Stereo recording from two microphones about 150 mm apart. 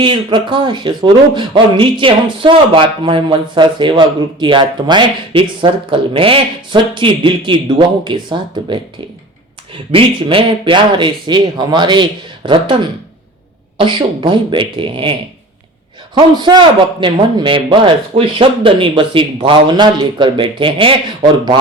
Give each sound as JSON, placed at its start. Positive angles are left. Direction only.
{"t": 0.0, "sound": "a man's voice", "side_deg": -30}
{"t": 9.9, "sound": "a man's voice", "side_deg": -35}
{"t": 16.1, "sound": "a man's voice", "side_deg": -30}